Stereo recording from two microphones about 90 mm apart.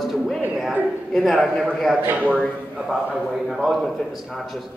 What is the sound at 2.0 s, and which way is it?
Speech, 20° right (ahead or behind).